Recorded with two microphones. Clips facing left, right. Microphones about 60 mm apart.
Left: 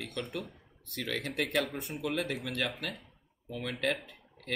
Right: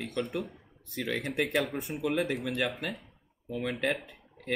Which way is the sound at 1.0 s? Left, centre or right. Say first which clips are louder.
Right 3 dB; centre.